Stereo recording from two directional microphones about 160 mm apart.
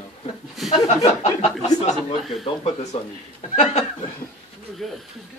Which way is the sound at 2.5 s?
35° left (ahead or behind).